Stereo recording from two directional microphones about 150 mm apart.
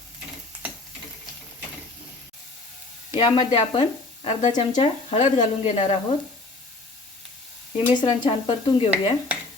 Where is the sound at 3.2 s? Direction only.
35° left (ahead or behind).